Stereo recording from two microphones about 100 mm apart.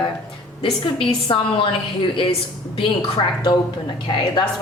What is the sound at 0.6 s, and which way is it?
A woman's voice, 60° left (ahead or behind).